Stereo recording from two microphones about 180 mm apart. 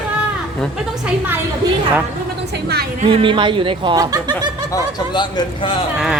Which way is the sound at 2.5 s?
65° right (ahead or behind).